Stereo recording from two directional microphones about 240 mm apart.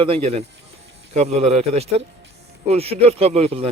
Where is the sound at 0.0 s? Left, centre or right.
Right.